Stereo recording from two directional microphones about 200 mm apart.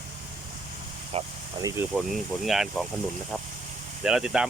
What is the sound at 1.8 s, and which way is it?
Speech, 10° right (ahead or behind).